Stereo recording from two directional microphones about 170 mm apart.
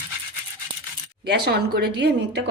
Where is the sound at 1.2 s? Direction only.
75° right (ahead or behind); by 2.4 s 90° right.